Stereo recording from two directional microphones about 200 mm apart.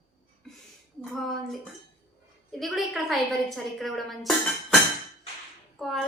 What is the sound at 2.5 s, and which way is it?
A woman's voice, centre (ahead or behind).